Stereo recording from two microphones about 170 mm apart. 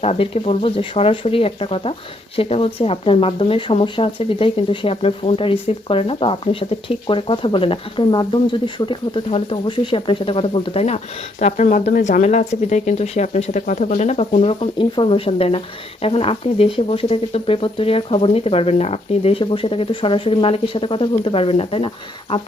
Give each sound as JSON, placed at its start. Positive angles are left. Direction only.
{"t": 0.0, "sound": "speech", "side_deg": 35}